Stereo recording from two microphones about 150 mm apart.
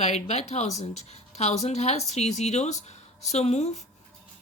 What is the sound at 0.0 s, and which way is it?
A woman's voice, 45° left (ahead or behind).